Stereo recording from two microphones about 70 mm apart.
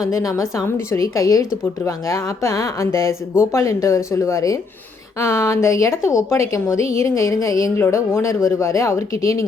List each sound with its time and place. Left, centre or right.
0.1 s a woman's voice: left
7.8 s a woman's voice: left